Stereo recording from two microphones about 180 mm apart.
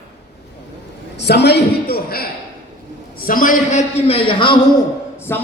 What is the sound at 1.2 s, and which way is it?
A man's voice, 65° left (ahead or behind).